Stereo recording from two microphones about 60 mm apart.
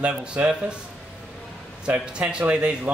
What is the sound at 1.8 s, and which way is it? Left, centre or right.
Speech, centre.